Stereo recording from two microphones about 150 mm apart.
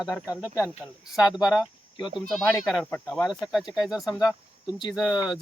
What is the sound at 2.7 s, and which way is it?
Speech, 5° left (ahead or behind).